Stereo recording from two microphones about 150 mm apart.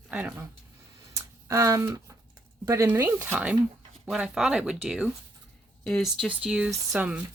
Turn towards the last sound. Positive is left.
turn(degrees=-10)  # may be behind; listen again after turning